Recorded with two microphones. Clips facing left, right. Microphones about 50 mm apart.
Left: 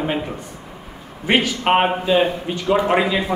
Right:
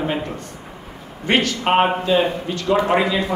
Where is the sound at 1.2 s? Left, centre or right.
Centre.